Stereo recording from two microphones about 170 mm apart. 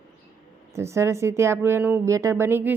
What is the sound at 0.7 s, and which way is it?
Speech, 15° right (ahead or behind).